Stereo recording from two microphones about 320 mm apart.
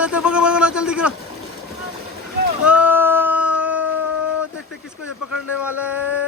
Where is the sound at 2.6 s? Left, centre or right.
Centre.